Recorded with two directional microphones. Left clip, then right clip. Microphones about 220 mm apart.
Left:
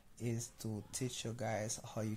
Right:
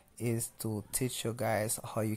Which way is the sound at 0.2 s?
25° right (ahead or behind).